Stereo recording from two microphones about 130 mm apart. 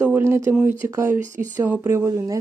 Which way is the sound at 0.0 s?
15° right (ahead or behind).